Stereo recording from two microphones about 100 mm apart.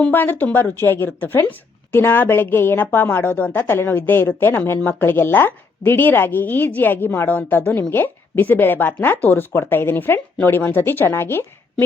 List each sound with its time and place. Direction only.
0.0 s speech: 20° left (ahead or behind)